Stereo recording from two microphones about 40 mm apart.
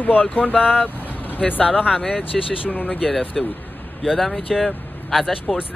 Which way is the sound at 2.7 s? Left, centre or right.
Left.